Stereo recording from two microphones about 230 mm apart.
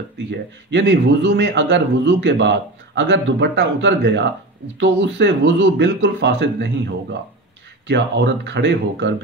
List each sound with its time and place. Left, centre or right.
0.3 s a man's voice: right